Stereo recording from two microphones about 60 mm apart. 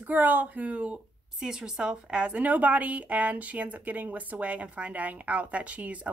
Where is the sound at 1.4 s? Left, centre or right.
Centre.